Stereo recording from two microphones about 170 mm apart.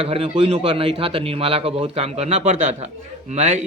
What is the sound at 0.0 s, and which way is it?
Speech, 35° right (ahead or behind).